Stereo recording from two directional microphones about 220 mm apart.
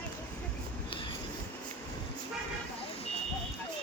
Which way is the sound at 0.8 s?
20° left (ahead or behind).